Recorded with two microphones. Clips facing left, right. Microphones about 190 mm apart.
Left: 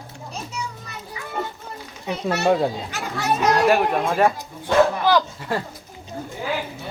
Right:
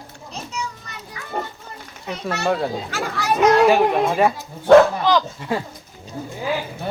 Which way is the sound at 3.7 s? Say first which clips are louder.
Right 3 dB; 5° right (ahead or behind).